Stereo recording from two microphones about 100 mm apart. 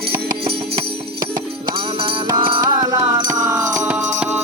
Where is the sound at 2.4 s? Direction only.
55° right (ahead or behind).